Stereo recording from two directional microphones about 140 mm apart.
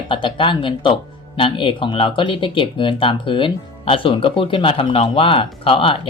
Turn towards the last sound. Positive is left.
turn(degrees=40)  # may be behind; listen again after turning